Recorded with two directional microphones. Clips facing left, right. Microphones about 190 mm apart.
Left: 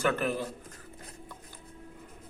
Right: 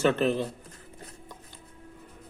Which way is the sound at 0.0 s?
25° right (ahead or behind).